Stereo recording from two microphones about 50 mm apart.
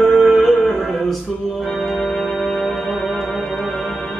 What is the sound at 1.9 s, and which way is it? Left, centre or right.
Music, centre.